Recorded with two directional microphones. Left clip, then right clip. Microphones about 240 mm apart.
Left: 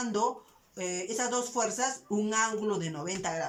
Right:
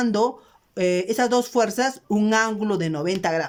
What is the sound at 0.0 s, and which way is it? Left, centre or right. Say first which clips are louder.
Speech: right 8 dB; right.